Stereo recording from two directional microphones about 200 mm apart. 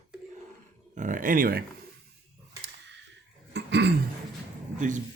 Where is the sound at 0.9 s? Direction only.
40° right (ahead or behind).